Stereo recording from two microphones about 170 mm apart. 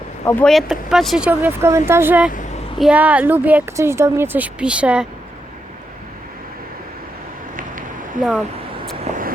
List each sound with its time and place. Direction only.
0.3 s speech: 10° left (ahead or behind)
0.5 s speech: centre (ahead or behind)
7.5 s a sound: 50° right (ahead or behind)
8.2 s speech: centre (ahead or behind)